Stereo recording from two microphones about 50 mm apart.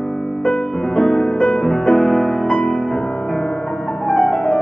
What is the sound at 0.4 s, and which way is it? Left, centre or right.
Music, centre.